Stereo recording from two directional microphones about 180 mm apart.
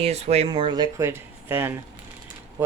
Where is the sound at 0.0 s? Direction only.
35° right (ahead or behind).